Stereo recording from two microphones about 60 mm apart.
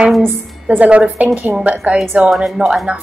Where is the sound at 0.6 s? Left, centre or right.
Right.